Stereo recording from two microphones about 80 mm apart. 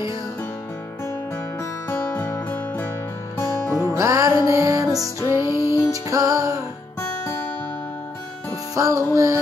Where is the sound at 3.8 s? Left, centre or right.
Right.